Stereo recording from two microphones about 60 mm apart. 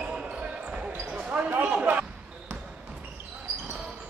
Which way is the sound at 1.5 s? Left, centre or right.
Right.